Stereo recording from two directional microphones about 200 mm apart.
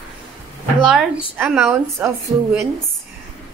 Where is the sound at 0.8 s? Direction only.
5° right (ahead or behind).